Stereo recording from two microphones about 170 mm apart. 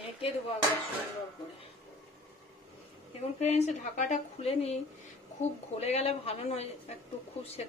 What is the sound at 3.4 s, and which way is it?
A woman's voice, 40° left (ahead or behind).